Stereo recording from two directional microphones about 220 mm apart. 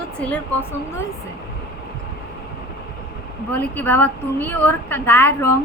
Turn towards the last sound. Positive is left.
turn(degrees=10)  # may be behind; listen again after turning